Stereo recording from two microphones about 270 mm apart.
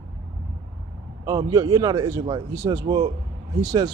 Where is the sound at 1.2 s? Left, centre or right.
Centre.